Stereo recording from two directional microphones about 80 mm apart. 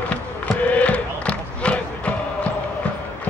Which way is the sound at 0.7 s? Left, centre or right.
Centre.